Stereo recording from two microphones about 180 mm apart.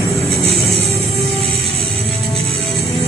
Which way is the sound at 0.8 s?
Centre (ahead or behind).